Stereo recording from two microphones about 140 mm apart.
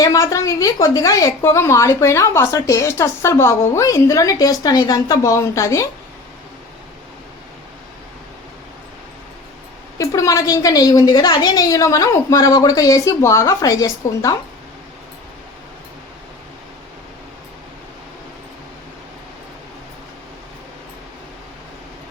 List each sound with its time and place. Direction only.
0.0 s a woman's voice: 25° left (ahead or behind)
10.0 s a woman's voice: 25° left (ahead or behind)